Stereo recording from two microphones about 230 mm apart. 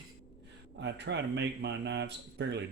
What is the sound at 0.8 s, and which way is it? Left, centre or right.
Speech, right.